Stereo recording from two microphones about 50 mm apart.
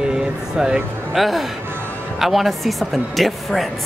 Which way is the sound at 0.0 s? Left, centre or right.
Centre.